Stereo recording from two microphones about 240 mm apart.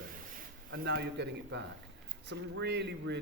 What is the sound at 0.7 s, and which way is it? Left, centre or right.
A man's voice, right.